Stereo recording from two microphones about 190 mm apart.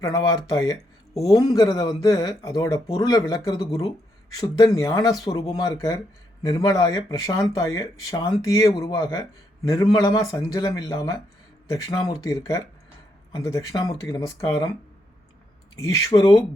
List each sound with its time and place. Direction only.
0.0 s speech: 20° left (ahead or behind)
15.7 s speech: 15° left (ahead or behind)